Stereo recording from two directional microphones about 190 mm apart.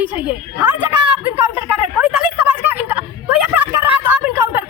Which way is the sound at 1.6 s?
10° right (ahead or behind).